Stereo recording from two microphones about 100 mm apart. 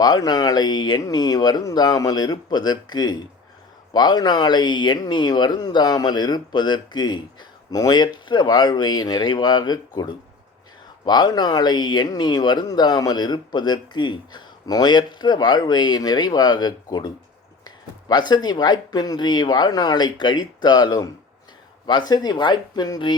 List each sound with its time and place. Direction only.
0.0 s speech: 40° left (ahead or behind)
18.1 s speech: 45° left (ahead or behind)